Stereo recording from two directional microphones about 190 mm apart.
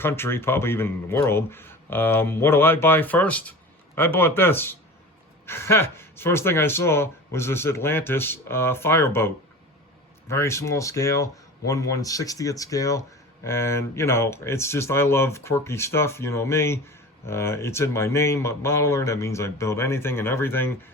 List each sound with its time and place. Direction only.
0.0 s speech: 10° left (ahead or behind)